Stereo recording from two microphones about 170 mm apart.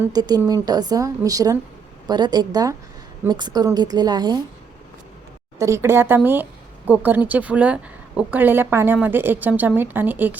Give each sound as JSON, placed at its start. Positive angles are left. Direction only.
{"t": 0.0, "sound": "speech", "side_deg": -20}
{"t": 5.5, "sound": "speech", "side_deg": -15}